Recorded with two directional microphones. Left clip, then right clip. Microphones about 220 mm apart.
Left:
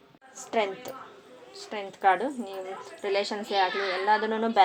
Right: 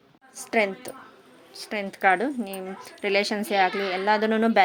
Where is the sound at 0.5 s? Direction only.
35° right (ahead or behind).